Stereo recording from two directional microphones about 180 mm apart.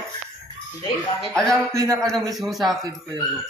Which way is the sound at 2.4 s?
Centre (ahead or behind).